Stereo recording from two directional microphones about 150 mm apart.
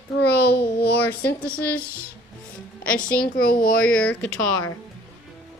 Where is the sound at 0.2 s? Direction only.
90° left.